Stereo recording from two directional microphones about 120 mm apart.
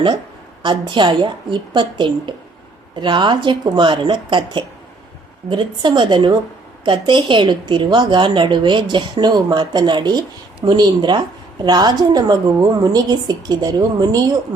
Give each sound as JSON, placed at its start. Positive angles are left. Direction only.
{"t": 0.6, "sound": "a woman's voice", "side_deg": -40}